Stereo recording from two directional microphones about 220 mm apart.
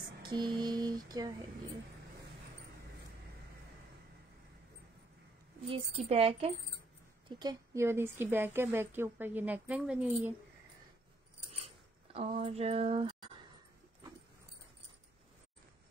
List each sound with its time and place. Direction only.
0.2 s music: 20° right (ahead or behind)
5.7 s music: 25° right (ahead or behind)
7.2 s a woman's voice: 20° right (ahead or behind)
11.6 s a sound: 25° right (ahead or behind)